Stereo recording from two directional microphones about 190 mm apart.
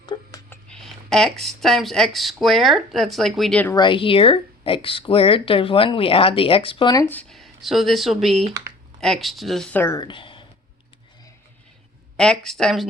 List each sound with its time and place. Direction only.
0.0 s a sound: 25° left (ahead or behind)
0.5 s speech: 5° left (ahead or behind)
3.8 s speech: 25° left (ahead or behind)
10.0 s speech: 25° left (ahead or behind)
12.1 s speech: 5° left (ahead or behind)